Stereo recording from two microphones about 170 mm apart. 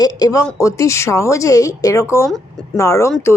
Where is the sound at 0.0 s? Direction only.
20° left (ahead or behind).